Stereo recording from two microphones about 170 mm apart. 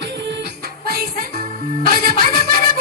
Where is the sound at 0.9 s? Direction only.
65° right (ahead or behind).